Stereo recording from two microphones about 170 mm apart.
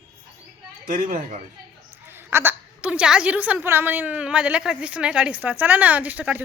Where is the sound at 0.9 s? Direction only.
50° right (ahead or behind).